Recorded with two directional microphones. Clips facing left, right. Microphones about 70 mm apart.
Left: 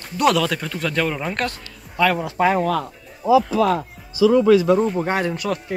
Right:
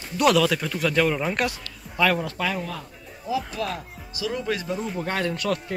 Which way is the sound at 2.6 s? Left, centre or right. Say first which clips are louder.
Left 12 dB; left.